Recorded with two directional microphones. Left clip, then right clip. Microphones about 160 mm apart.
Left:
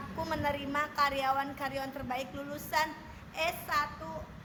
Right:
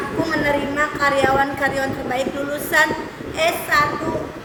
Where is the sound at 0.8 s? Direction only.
15° right (ahead or behind).